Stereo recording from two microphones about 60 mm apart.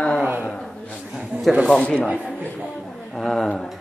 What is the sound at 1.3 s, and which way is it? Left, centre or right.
Speech, right.